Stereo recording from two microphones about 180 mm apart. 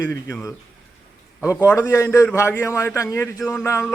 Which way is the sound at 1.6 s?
15° left (ahead or behind).